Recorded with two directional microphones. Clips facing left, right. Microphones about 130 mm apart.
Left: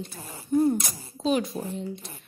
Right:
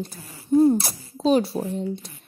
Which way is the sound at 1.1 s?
35° right (ahead or behind).